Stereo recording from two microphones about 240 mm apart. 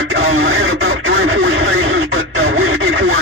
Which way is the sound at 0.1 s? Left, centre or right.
Right.